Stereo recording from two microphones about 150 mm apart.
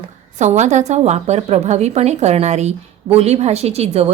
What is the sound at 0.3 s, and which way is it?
A woman's voice, 50° right (ahead or behind).